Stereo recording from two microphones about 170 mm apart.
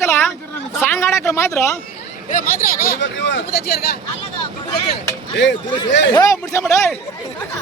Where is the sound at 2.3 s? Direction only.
55° left (ahead or behind).